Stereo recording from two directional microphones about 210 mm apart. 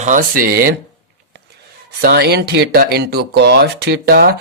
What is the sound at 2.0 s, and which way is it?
Speech, 50° right (ahead or behind).